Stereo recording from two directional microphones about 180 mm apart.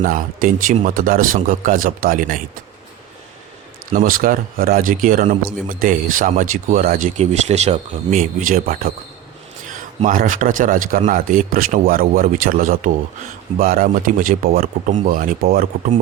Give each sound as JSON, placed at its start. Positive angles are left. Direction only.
{"t": 0.0, "sound": "speech", "side_deg": -50}
{"t": 3.9, "sound": "speech", "side_deg": -50}
{"t": 7.2, "sound": "speech", "side_deg": -40}